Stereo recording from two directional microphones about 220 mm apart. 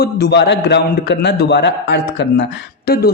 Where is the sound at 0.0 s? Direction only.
45° left (ahead or behind).